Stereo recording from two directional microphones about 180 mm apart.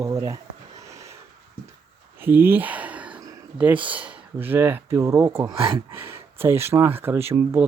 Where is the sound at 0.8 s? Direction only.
15° right (ahead or behind).